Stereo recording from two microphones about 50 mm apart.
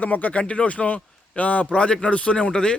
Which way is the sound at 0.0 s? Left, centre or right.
Left.